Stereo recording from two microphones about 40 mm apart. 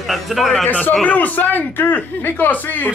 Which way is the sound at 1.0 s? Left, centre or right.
Left.